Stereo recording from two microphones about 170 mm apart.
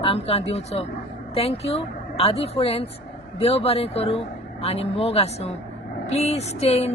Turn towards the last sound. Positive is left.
turn(degrees=35)  # may be behind; listen again after turning